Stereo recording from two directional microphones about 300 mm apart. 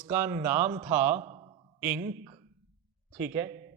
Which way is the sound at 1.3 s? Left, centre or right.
Centre.